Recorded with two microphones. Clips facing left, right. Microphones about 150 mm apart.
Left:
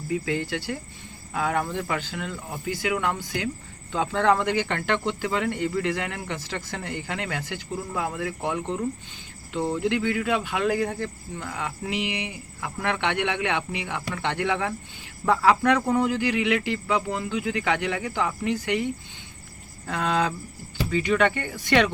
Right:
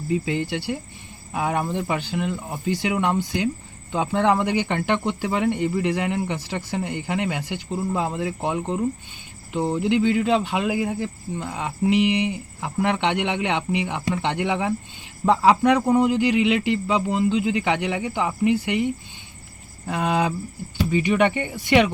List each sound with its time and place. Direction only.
0.1 s speech: 20° right (ahead or behind)
10.7 s speech: 10° right (ahead or behind)
19.9 s speech: 15° right (ahead or behind)